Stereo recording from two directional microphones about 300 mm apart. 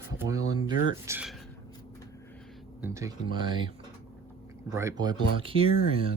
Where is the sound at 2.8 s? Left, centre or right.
Centre.